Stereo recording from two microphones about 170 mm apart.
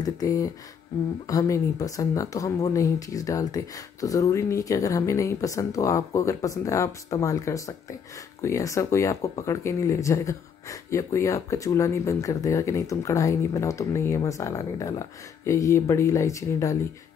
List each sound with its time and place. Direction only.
0.0 s speech: 20° left (ahead or behind)